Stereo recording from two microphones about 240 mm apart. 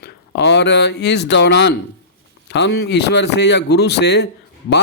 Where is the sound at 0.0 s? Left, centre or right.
Left.